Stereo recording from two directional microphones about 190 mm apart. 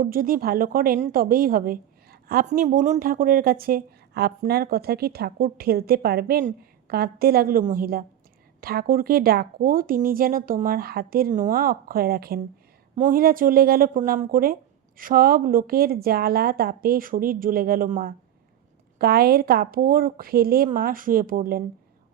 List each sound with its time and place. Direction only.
0.0 s speech: 50° right (ahead or behind)